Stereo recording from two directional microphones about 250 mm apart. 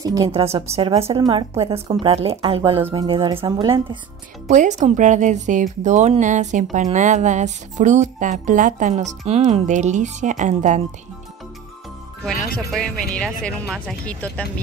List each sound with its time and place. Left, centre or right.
0.0 s speech: centre; by 10.8 s right
12.7 s speech: centre